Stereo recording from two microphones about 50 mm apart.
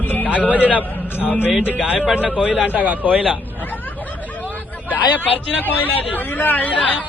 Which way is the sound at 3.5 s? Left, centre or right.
Left.